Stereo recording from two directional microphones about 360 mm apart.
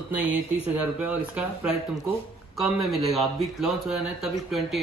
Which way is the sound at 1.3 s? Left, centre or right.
Centre.